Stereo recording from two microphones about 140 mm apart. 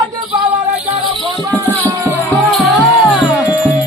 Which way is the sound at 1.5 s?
15° left (ahead or behind).